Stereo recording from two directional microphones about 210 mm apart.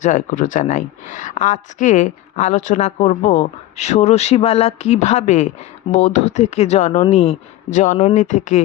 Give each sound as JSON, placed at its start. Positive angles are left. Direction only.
{"t": 0.0, "sound": "speech", "side_deg": 40}